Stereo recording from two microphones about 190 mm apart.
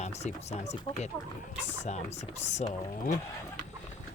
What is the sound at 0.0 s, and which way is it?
Speech, 35° left (ahead or behind).